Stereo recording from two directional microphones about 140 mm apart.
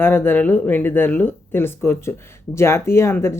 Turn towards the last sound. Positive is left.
turn(degrees=20)  # may be behind; listen again after turning